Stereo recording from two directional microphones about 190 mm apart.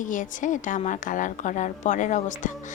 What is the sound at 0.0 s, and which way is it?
A woman's voice, 40° left (ahead or behind).